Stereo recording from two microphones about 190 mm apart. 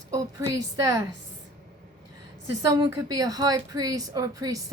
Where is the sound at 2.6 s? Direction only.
20° right (ahead or behind).